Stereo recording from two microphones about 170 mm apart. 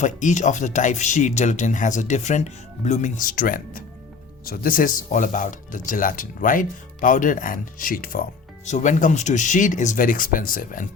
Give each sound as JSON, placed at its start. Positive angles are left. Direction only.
{"t": 0.0, "sound": "speech", "side_deg": 45}